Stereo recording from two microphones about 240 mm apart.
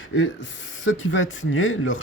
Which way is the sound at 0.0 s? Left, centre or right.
Left.